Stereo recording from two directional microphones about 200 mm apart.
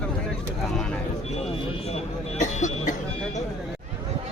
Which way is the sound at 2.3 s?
35° left (ahead or behind).